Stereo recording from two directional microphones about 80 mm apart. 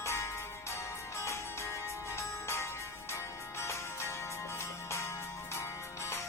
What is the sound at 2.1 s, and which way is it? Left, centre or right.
Music, left.